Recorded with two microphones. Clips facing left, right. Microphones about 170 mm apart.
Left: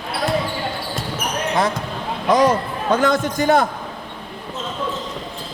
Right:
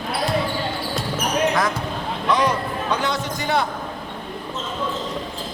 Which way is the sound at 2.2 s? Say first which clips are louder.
Left 5 dB; 45° left (ahead or behind).